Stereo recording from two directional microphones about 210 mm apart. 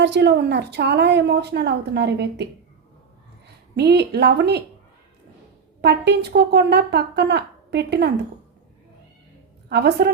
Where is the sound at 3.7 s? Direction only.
50° right (ahead or behind).